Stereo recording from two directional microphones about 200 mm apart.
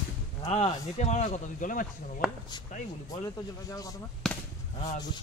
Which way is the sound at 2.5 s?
20° left (ahead or behind).